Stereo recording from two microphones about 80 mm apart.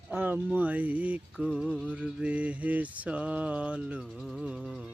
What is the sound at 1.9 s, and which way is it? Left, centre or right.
Mantra, centre.